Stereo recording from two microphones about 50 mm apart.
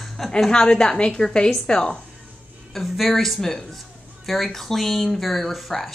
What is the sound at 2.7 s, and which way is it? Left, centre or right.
A woman's voice, centre.